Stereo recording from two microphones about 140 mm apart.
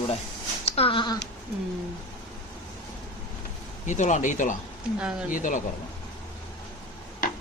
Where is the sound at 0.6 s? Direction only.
45° left (ahead or behind).